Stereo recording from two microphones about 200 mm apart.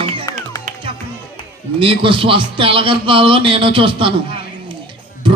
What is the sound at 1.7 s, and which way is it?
A man's voice, 25° right (ahead or behind).